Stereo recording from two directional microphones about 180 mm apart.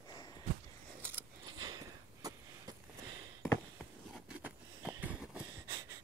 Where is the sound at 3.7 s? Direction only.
5° right (ahead or behind).